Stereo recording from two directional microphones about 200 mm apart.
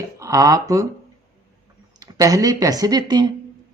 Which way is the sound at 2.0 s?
15° right (ahead or behind).